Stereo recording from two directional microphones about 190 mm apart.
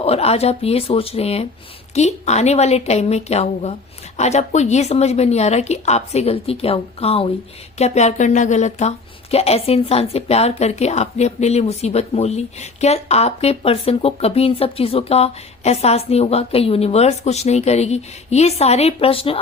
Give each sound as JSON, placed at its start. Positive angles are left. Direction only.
{"t": 0.0, "sound": "a woman's voice", "side_deg": 30}